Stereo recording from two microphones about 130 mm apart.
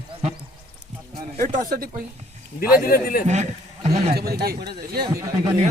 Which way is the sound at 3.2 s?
60° right (ahead or behind).